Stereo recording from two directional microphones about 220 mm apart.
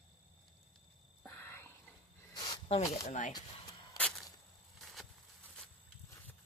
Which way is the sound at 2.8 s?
35° left (ahead or behind).